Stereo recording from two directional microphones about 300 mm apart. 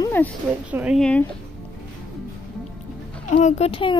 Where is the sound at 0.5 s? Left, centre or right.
Centre.